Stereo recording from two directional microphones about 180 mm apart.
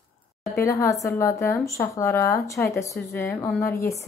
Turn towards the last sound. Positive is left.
turn(degrees=15)  # may be behind; listen again after turning